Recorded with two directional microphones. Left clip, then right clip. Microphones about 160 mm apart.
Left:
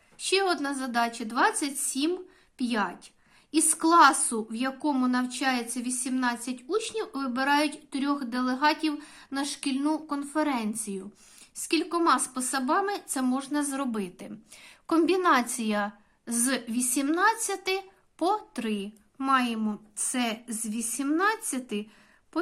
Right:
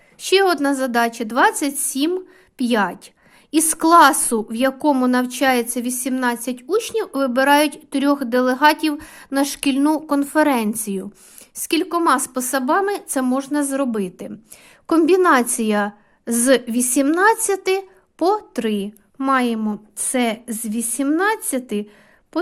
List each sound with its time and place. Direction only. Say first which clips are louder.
0.2 s a woman's voice: right 10 dB; 50° right (ahead or behind)